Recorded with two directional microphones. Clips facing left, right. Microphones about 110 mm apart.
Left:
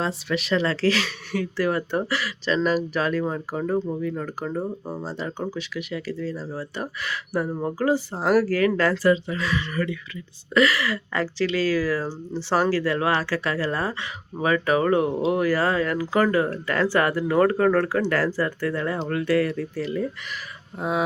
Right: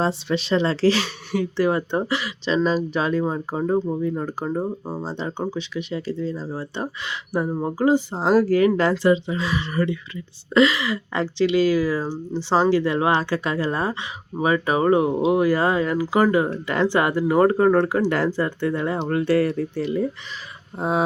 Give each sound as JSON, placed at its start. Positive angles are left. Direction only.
{"t": 0.0, "sound": "speech", "side_deg": -30}